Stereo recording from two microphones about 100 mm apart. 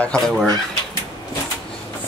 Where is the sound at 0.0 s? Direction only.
10° left (ahead or behind).